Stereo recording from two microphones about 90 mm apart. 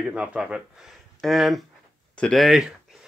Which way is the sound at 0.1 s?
10° right (ahead or behind).